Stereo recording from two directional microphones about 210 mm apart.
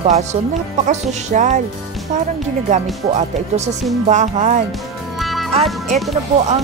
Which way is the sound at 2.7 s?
35° right (ahead or behind).